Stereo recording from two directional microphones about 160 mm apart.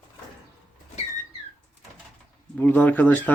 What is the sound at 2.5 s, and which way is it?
Speech, 10° left (ahead or behind).